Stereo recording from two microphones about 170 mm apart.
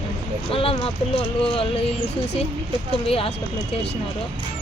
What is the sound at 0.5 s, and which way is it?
Speech, 35° left (ahead or behind).